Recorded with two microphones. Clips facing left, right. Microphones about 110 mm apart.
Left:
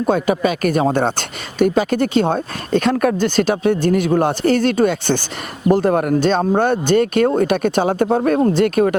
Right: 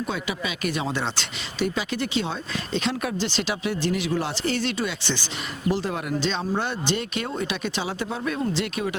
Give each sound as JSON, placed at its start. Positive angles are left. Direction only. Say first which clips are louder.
{"t": 0.0, "sound": "speech", "louder": "left 13 dB", "side_deg": 50}